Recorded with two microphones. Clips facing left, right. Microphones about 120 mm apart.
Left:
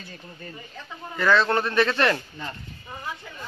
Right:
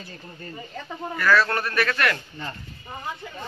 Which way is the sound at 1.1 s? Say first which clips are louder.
Left 1 dB; 25° left (ahead or behind).